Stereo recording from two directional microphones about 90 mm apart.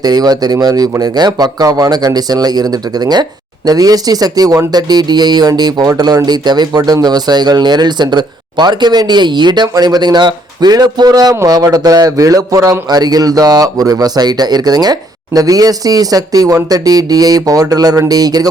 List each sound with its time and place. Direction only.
0.0 s speech: 45° right (ahead or behind)